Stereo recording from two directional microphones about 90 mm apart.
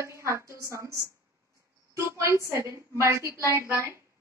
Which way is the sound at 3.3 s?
40° left (ahead or behind).